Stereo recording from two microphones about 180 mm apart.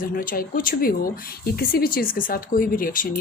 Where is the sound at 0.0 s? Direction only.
50° left (ahead or behind).